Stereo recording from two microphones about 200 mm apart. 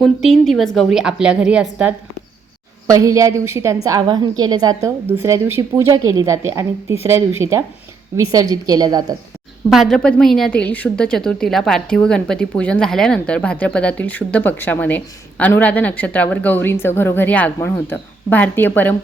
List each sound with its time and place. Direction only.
0.0 s a woman's voice: centre (ahead or behind)
2.8 s a woman's voice: 15° right (ahead or behind)
9.6 s a woman's voice: centre (ahead or behind)